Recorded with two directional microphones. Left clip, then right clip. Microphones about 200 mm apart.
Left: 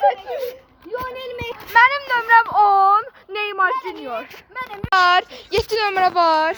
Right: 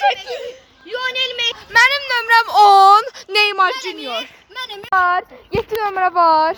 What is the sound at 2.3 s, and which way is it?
Speech, 45° right (ahead or behind).